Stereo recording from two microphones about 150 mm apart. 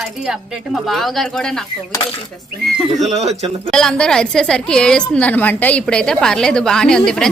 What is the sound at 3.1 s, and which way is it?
Speech, 45° right (ahead or behind).